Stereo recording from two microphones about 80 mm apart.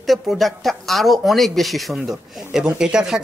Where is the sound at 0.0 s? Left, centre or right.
Centre.